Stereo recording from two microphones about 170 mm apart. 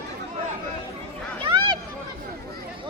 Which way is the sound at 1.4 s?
30° right (ahead or behind).